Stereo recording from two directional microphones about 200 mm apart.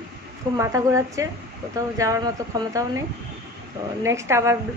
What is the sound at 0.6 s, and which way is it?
A woman's voice, 15° right (ahead or behind).